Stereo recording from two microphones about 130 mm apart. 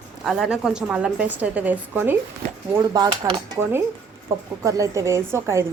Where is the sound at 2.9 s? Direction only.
35° right (ahead or behind).